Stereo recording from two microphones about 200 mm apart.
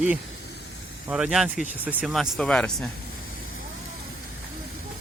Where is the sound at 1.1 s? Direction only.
5° right (ahead or behind).